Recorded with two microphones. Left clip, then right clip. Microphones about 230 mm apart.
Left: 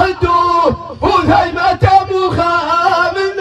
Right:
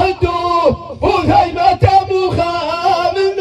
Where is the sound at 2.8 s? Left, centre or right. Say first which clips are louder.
Right 1 dB; left.